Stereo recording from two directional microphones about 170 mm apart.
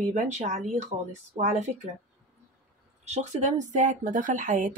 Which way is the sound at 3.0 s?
40° right (ahead or behind).